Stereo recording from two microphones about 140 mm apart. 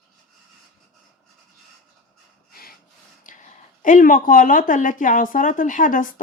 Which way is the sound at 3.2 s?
65° left (ahead or behind).